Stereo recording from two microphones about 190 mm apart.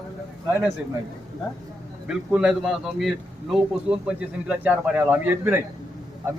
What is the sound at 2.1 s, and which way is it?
A man's voice, 5° right (ahead or behind).